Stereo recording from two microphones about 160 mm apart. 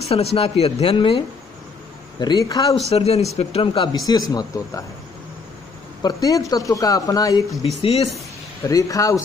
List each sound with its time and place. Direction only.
0.0 s speech: 40° left (ahead or behind); by 2.8 s 25° left (ahead or behind)
2.9 s speech: 40° left (ahead or behind); by 4.8 s 25° left (ahead or behind)
6.0 s speech: 20° left (ahead or behind)
7.8 s speech: 40° left (ahead or behind)
8.6 s speech: 20° left (ahead or behind)